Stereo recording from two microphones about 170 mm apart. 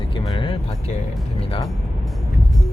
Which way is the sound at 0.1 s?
25° left (ahead or behind).